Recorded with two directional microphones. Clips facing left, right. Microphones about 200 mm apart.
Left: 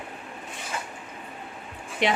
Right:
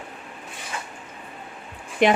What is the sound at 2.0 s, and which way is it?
Speech, 50° right (ahead or behind).